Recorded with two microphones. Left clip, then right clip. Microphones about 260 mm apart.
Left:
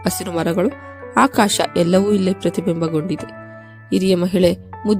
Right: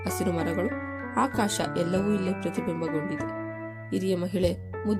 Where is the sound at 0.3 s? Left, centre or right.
Left.